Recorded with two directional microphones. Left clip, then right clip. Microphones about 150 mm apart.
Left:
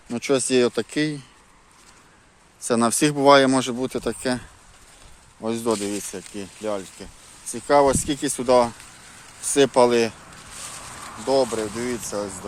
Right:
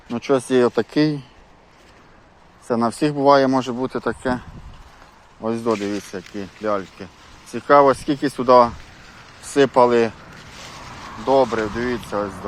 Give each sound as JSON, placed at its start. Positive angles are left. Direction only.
{"t": 0.1, "sound": "speech", "side_deg": 55}
{"t": 0.7, "sound": "speech", "side_deg": 25}
{"t": 2.6, "sound": "speech", "side_deg": 75}
{"t": 5.4, "sound": "speech", "side_deg": 45}
{"t": 9.5, "sound": "speech", "side_deg": 60}
{"t": 11.8, "sound": "speech", "side_deg": 35}